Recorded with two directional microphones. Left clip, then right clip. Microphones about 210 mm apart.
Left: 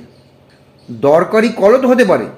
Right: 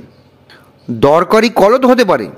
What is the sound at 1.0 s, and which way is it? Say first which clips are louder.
A man's voice: right 2 dB; 50° right (ahead or behind).